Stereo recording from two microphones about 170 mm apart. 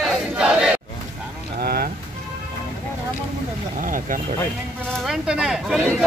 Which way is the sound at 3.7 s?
55° right (ahead or behind).